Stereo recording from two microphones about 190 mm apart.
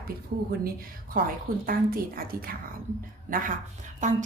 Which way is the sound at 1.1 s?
50° right (ahead or behind).